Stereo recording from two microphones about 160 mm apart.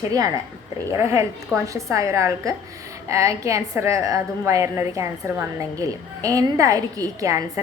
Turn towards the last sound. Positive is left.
turn(degrees=-20)  # may be behind; listen again after turning